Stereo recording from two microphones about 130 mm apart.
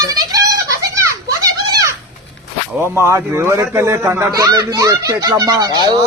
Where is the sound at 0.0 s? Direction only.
30° right (ahead or behind).